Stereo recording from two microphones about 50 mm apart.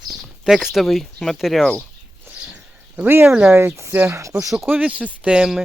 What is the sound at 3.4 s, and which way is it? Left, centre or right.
Speech, right.